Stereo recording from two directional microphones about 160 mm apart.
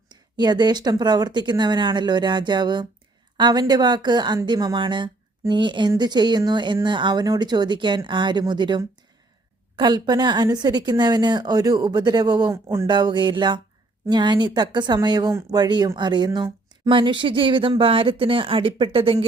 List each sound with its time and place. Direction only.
0.1 s speech: 25° right (ahead or behind)